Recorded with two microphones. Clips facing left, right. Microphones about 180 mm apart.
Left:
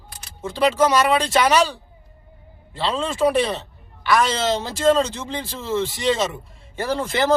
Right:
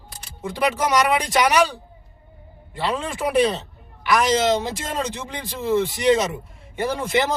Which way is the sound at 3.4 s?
20° right (ahead or behind).